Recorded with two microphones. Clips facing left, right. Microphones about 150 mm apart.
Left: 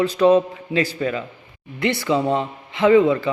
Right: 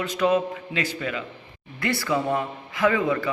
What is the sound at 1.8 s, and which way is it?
A man's voice, 20° left (ahead or behind).